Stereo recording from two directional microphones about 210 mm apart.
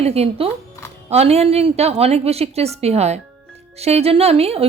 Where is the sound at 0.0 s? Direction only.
30° right (ahead or behind).